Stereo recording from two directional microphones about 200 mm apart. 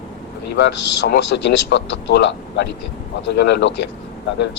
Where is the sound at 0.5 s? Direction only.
60° left (ahead or behind).